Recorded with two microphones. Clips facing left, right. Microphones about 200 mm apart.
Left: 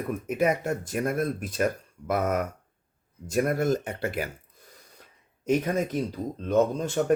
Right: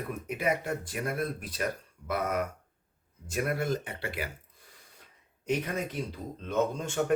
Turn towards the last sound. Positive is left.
turn(degrees=40)  # may be behind; listen again after turning